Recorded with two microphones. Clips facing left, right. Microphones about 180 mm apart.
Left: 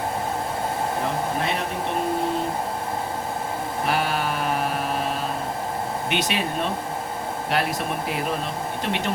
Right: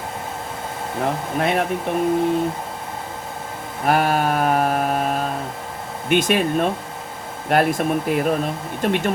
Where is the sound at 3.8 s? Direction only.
50° right (ahead or behind).